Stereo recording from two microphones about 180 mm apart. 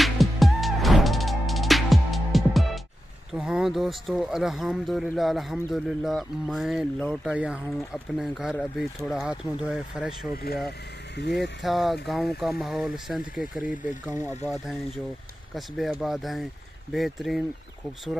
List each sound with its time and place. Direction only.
0.0 s music: centre (ahead or behind)
3.3 s speech: 5° right (ahead or behind)
10.3 s speech: 60° left (ahead or behind)
11.1 s speech: 75° left (ahead or behind)
11.6 s speech: centre (ahead or behind)